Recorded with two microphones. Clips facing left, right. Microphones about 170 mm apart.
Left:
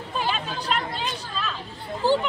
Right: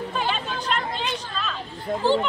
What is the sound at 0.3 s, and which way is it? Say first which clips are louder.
Chatter: even; 5° left (ahead or behind).